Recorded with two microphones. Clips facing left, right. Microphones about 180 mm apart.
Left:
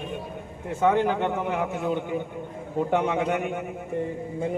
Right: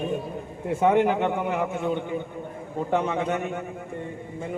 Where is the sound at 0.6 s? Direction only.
20° right (ahead or behind); by 3.7 s 15° left (ahead or behind).